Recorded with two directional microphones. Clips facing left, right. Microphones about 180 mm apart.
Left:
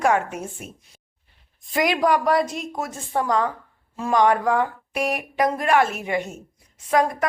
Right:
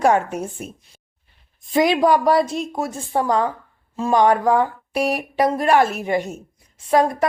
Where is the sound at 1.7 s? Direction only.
25° right (ahead or behind).